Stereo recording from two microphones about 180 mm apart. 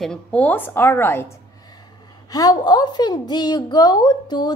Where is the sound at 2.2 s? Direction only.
20° left (ahead or behind).